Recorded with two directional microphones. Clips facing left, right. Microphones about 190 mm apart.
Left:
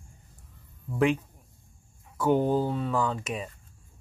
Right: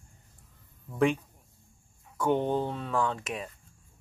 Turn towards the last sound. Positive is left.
turn(degrees=0)  # may be behind; listen again after turning